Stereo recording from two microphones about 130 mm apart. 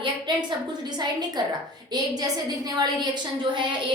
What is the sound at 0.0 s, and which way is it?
A woman's voice, 35° right (ahead or behind).